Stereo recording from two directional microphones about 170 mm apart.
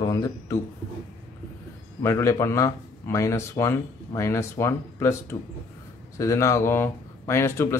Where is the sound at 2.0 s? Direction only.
15° left (ahead or behind).